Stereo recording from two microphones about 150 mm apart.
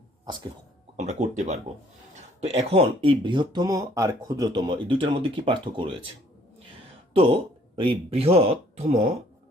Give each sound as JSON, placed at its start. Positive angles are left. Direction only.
{"t": 0.9, "sound": "speech", "side_deg": -50}
{"t": 7.1, "sound": "speech", "side_deg": -40}